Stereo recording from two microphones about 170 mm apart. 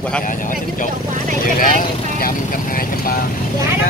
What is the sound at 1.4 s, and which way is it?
Speech, 55° left (ahead or behind).